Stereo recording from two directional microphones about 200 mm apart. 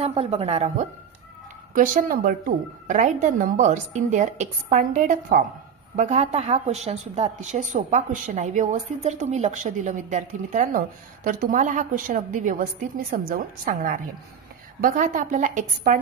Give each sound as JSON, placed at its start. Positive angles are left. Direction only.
{"t": 0.0, "sound": "a woman's voice", "side_deg": -30}